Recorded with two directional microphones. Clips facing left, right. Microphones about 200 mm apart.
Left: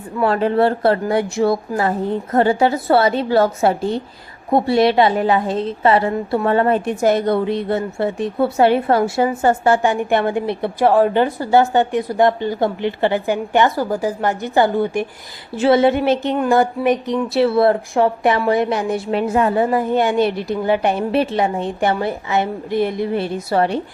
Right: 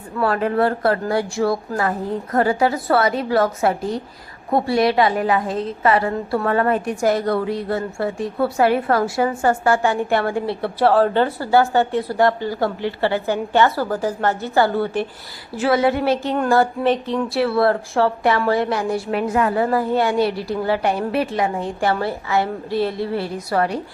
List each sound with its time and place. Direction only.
0.2 s a woman's voice: 25° left (ahead or behind)
17.3 s a woman's voice: 20° left (ahead or behind)